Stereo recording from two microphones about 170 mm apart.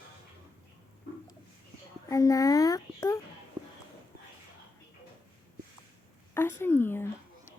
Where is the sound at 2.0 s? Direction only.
20° left (ahead or behind).